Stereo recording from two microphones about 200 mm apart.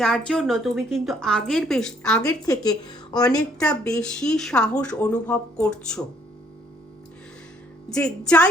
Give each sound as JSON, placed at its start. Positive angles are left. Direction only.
{"t": 0.3, "sound": "speech", "side_deg": 0}
{"t": 2.2, "sound": "a woman's voice", "side_deg": 20}
{"t": 3.6, "sound": "speech", "side_deg": 5}
{"t": 7.9, "sound": "speech", "side_deg": 5}